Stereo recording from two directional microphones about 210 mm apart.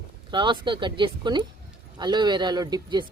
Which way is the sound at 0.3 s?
20° right (ahead or behind).